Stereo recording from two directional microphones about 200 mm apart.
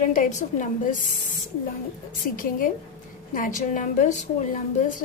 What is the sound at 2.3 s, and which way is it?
A woman's voice, 45° left (ahead or behind).